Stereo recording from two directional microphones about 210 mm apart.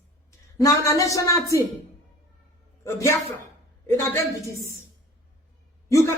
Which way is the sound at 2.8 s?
15° left (ahead or behind).